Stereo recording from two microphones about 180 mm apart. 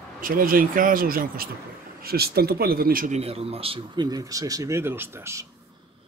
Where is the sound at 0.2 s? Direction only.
50° right (ahead or behind).